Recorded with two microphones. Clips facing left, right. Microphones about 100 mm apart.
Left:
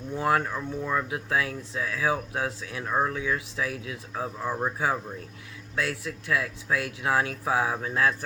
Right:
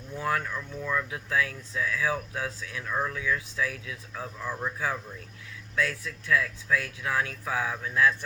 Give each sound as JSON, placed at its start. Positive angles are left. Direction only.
{"t": 0.3, "sound": "speech", "side_deg": 30}